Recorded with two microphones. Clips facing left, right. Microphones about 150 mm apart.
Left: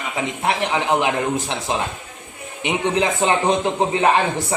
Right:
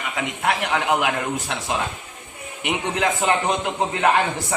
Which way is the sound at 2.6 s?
25° left (ahead or behind).